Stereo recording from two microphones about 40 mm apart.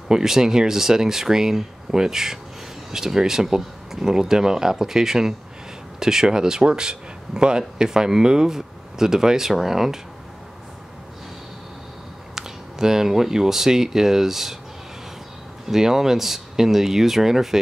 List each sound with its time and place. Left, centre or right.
0.1 s speech: centre
12.4 s speech: centre
15.7 s speech: centre